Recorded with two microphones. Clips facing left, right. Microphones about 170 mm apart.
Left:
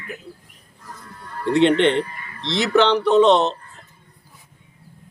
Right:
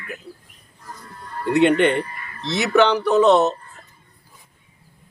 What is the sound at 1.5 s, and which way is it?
Speech, 30° left (ahead or behind).